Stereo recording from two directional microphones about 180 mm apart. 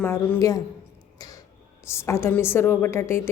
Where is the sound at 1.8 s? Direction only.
15° left (ahead or behind).